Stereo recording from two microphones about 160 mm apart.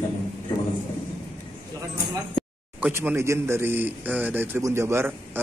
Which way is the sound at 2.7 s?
10° right (ahead or behind).